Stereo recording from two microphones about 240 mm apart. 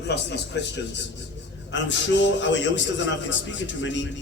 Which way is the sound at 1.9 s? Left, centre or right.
Left.